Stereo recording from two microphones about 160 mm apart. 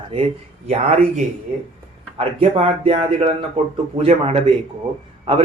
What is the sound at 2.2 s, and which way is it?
Speech, 35° right (ahead or behind).